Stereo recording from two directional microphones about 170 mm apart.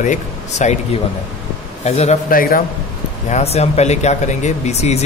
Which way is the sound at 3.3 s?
40° left (ahead or behind).